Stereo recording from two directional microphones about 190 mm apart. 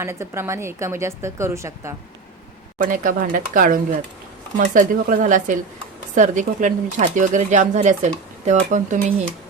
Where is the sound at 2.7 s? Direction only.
45° right (ahead or behind).